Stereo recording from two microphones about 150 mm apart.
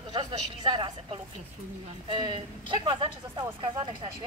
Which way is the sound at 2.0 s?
30° right (ahead or behind).